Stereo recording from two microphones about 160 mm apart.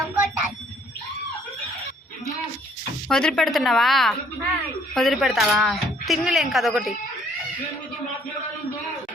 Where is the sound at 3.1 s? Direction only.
5° left (ahead or behind).